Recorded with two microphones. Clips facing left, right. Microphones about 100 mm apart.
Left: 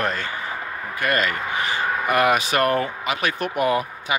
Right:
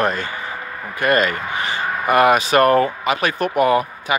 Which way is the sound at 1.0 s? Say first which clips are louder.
Right 5 dB; 30° right (ahead or behind).